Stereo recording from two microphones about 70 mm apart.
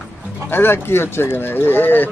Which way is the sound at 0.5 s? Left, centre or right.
Left.